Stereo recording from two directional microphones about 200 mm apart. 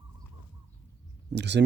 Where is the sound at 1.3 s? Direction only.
60° right (ahead or behind).